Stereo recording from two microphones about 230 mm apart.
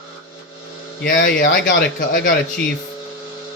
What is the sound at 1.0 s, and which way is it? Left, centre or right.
Speech, left.